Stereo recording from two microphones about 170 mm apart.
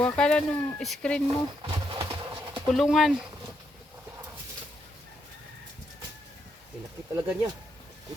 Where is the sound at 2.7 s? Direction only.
Centre (ahead or behind).